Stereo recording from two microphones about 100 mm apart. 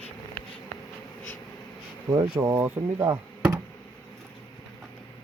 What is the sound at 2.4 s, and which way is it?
Speech, 25° right (ahead or behind).